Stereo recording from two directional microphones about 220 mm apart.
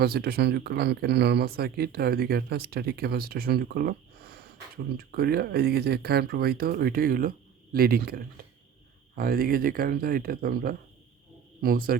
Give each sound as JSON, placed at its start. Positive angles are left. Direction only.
{"t": 0.0, "sound": "speech", "side_deg": -45}